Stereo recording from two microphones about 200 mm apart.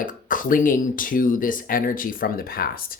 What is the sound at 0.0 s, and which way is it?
Speech, 40° left (ahead or behind).